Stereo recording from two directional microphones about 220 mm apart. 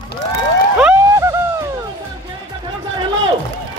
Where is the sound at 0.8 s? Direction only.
10° right (ahead or behind).